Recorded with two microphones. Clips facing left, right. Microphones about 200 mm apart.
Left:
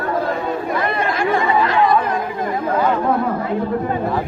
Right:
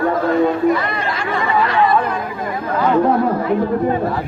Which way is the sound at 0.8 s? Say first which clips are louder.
Left 3 dB; 50° left (ahead or behind).